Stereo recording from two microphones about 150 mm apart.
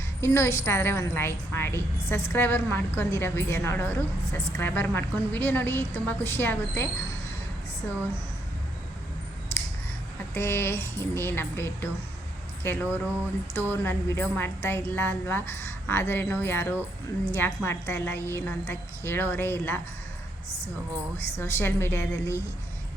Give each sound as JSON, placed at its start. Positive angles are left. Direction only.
{"t": 0.2, "sound": "a woman's voice", "side_deg": 20}
{"t": 9.5, "sound": "a sound", "side_deg": 15}
{"t": 10.3, "sound": "a woman's voice", "side_deg": 15}
{"t": 12.9, "sound": "speech", "side_deg": -15}
{"t": 13.5, "sound": "a woman's voice", "side_deg": 15}
{"t": 21.3, "sound": "a woman's voice", "side_deg": 15}